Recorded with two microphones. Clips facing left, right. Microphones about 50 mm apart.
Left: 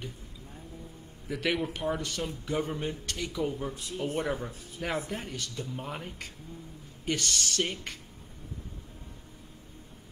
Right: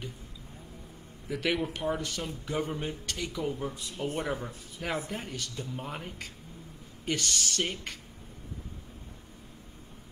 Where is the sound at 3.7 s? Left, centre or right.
Left.